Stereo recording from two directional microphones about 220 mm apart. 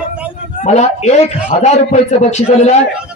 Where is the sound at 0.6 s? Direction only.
30° left (ahead or behind).